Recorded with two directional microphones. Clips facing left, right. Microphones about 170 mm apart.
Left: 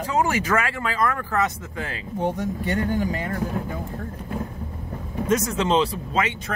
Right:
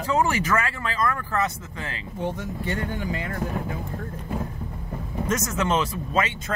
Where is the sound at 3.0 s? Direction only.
40° left (ahead or behind).